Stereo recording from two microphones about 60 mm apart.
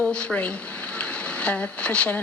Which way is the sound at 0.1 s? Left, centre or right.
Centre.